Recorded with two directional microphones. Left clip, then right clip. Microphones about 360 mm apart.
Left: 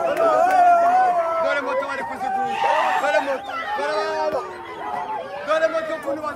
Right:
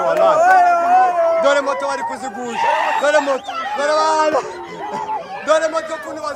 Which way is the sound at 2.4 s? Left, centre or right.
Right.